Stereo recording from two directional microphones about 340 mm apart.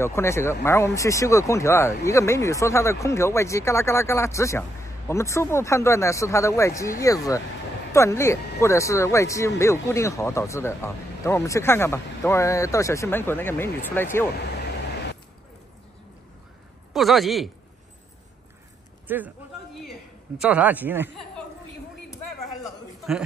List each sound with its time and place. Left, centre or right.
0.0 s speech: centre
16.9 s speech: centre
19.0 s a man's voice: centre
22.6 s a sound: centre